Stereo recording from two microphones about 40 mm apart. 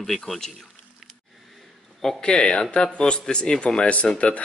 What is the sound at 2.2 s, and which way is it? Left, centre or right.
Speech, left.